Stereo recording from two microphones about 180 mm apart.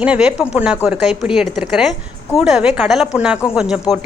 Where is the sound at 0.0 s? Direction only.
5° right (ahead or behind).